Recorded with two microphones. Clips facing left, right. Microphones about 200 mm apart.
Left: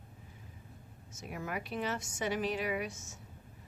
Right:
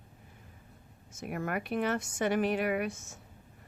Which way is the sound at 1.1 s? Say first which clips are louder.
Right 5 dB; 55° right (ahead or behind).